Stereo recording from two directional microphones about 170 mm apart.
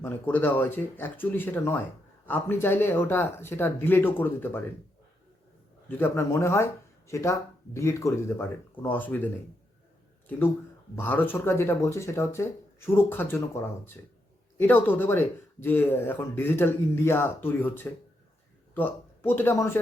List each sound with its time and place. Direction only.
0.0 s speech: 10° left (ahead or behind)
6.0 s speech: 15° left (ahead or behind)
10.9 s speech: 10° left (ahead or behind)